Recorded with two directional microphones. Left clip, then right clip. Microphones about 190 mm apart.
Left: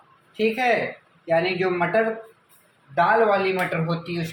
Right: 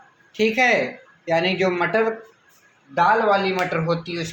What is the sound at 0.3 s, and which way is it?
Speech, 45° right (ahead or behind).